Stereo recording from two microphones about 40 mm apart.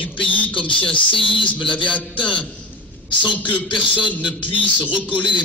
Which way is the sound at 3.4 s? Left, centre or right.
Left.